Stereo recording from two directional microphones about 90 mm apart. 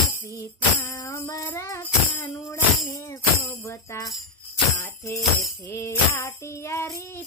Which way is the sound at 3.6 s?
30° left (ahead or behind).